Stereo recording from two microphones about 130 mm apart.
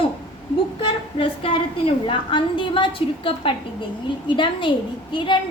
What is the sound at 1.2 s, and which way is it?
A woman's voice, 40° left (ahead or behind).